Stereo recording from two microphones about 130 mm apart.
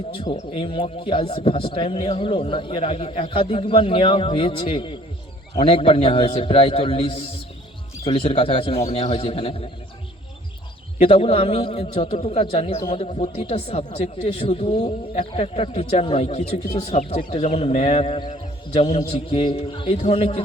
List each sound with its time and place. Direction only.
0.5 s a man's voice: 40° left (ahead or behind)
11.0 s a man's voice: 55° left (ahead or behind)
17.2 s speech: 40° left (ahead or behind)
17.4 s a man's voice: 55° left (ahead or behind)